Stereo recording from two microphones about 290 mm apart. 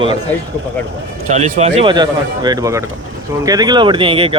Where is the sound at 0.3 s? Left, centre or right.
Centre.